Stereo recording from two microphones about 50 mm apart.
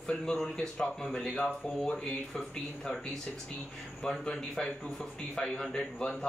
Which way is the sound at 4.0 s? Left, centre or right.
Centre.